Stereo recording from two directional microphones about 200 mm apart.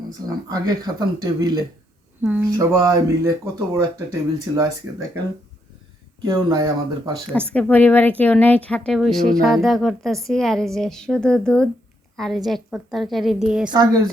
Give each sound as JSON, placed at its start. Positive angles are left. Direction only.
{"t": 0.3, "sound": "speech", "side_deg": -20}
{"t": 2.2, "sound": "speech", "side_deg": -10}
{"t": 6.2, "sound": "speech", "side_deg": -15}
{"t": 7.3, "sound": "a woman's voice", "side_deg": 5}
{"t": 13.7, "sound": "speech", "side_deg": -20}